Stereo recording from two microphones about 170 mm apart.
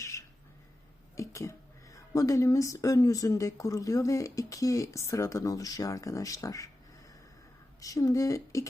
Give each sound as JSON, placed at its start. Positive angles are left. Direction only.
{"t": 0.0, "sound": "squawk", "side_deg": 20}
{"t": 1.1, "sound": "speech", "side_deg": 20}
{"t": 7.8, "sound": "speech", "side_deg": 20}